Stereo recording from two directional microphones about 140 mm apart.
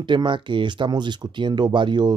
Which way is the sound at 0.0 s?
35° right (ahead or behind).